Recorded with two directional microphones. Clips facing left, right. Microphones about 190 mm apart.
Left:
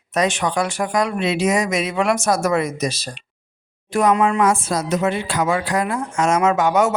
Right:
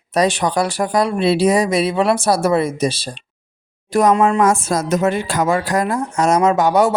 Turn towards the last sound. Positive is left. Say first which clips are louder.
# right 3 dB
turn(degrees=-35)  # may be behind; listen again after turning